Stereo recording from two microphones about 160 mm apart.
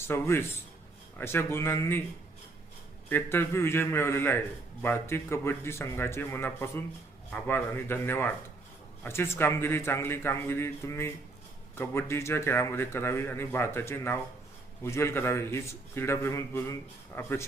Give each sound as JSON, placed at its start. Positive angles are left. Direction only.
{"t": 0.0, "sound": "a man's voice", "side_deg": 15}
{"t": 3.1, "sound": "a man's voice", "side_deg": 15}